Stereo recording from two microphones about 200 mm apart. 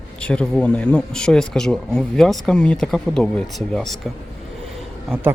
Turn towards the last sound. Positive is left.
turn(degrees=-10)  # may be behind; listen again after turning